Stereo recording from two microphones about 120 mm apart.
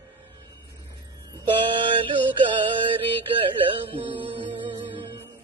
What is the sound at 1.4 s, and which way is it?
Mantra, 45° right (ahead or behind).